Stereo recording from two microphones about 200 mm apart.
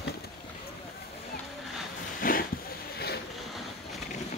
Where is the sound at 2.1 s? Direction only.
45° left (ahead or behind).